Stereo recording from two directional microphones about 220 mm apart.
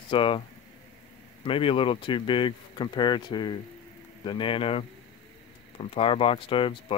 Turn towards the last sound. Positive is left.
turn(degrees=25)  # may be behind; listen again after turning